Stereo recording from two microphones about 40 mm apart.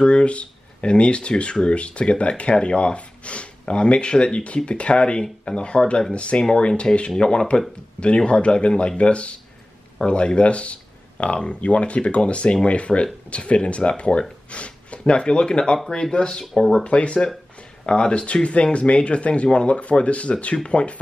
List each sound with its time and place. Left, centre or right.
0.0 s speech: left
16.8 s speech: left